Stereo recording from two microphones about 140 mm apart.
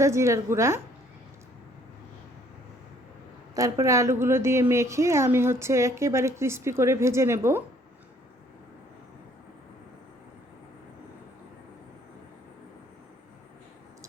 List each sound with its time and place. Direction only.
0.0 s a woman's voice: 20° right (ahead or behind)
3.5 s a woman's voice: 25° right (ahead or behind)